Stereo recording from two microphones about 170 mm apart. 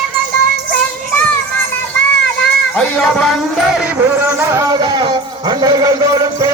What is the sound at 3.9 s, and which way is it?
Speech, 15° right (ahead or behind).